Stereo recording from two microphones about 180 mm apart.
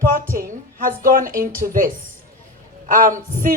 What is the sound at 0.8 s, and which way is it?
Speech, 50° right (ahead or behind).